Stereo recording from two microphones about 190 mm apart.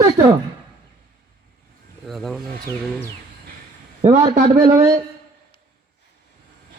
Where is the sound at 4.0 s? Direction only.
40° right (ahead or behind).